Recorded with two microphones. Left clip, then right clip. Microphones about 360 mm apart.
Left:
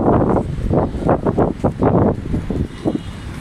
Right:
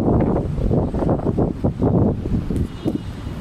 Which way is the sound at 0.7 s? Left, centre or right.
Left.